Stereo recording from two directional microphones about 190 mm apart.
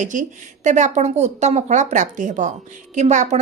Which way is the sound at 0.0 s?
40° right (ahead or behind).